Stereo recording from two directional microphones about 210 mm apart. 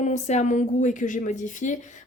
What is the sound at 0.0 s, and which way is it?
A woman's voice, 35° left (ahead or behind).